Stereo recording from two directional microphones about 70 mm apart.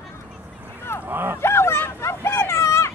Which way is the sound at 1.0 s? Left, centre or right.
Right.